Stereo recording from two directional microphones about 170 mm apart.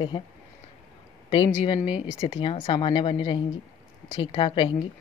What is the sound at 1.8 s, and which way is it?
A woman's voice, 30° left (ahead or behind).